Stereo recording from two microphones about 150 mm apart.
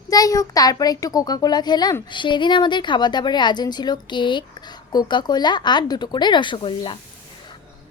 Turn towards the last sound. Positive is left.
turn(degrees=35)  # may be behind; listen again after turning